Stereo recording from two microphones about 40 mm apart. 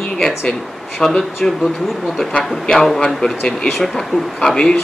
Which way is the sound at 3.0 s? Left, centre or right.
Centre.